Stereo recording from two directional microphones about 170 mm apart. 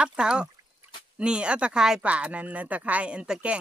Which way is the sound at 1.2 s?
5° right (ahead or behind).